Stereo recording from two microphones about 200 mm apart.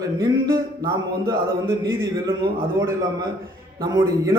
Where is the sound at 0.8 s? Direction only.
20° right (ahead or behind).